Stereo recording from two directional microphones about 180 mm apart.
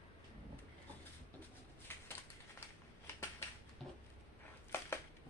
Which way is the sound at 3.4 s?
15° left (ahead or behind).